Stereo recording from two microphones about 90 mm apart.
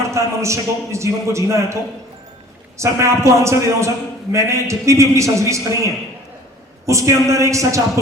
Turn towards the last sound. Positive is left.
turn(degrees=-35)  # may be behind; listen again after turning